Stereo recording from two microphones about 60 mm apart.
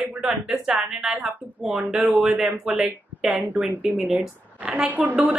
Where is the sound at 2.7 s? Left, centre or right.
Centre.